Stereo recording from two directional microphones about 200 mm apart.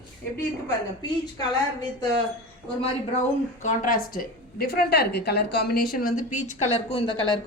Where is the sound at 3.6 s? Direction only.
45° left (ahead or behind).